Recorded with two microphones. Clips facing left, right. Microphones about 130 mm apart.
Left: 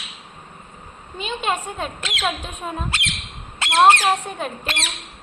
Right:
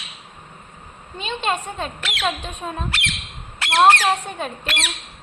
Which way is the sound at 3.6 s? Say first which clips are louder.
Even; 20° left (ahead or behind).